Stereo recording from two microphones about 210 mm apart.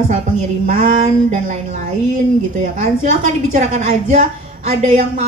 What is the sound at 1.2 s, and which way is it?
A woman's voice, 35° right (ahead or behind).